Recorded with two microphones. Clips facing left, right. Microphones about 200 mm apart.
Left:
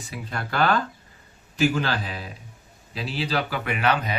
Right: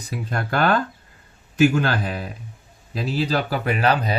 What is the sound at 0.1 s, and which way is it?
Speech, 50° right (ahead or behind).